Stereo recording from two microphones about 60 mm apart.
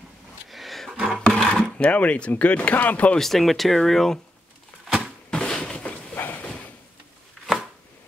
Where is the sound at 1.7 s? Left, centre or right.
Left.